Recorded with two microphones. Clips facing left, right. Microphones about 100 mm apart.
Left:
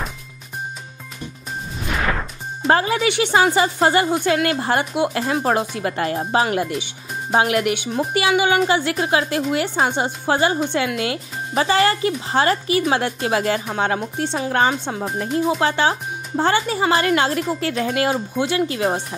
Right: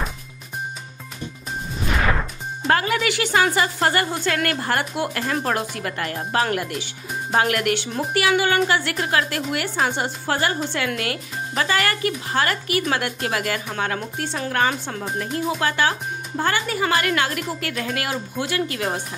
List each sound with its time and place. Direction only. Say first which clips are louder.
1.8 s music: right 1 dB; centre (ahead or behind)
2.7 s speech: left 3 dB; 25° left (ahead or behind)